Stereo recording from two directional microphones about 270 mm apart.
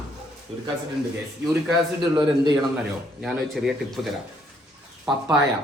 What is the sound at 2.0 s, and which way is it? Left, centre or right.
Speech, centre.